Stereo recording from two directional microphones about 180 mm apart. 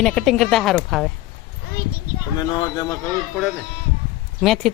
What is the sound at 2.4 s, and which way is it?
Speech, 20° left (ahead or behind).